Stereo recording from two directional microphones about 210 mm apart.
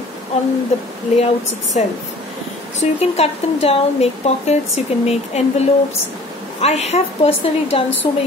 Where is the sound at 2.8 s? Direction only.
30° left (ahead or behind).